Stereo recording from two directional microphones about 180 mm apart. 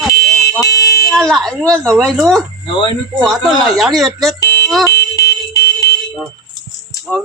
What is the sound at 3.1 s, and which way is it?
Speech, centre (ahead or behind).